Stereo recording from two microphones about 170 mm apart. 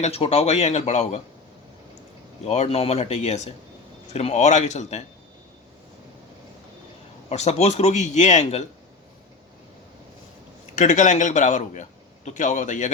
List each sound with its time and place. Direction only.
0.0 s a man's voice: 35° left (ahead or behind)
2.4 s a man's voice: 40° left (ahead or behind)
7.3 s a man's voice: 40° left (ahead or behind)
10.8 s a man's voice: 45° left (ahead or behind)